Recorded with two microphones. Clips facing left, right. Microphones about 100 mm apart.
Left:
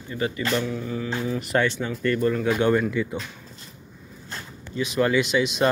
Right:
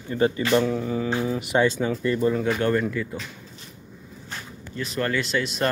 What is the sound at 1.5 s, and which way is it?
Speech, 15° right (ahead or behind).